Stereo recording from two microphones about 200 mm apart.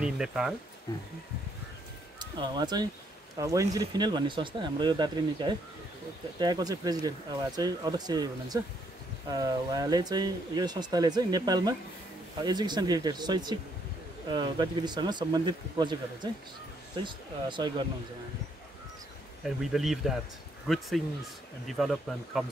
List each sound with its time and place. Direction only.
0.0 s speech: 5° right (ahead or behind)
2.1 s speech: 20° right (ahead or behind)
19.4 s speech: centre (ahead or behind)